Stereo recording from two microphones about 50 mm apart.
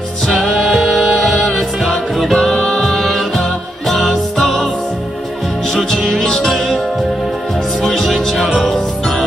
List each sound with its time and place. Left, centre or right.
0.3 s music: centre
4.1 s music: centre
5.7 s music: centre
6.0 s music: centre
7.8 s music: centre